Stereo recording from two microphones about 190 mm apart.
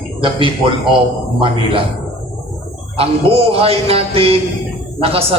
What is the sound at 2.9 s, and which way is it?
Music, 30° right (ahead or behind).